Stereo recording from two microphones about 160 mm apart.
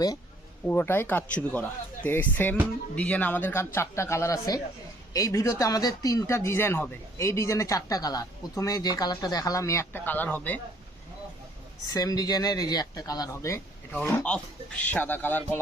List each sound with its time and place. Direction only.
0.7 s speech: 15° left (ahead or behind)
11.9 s speech: 20° left (ahead or behind)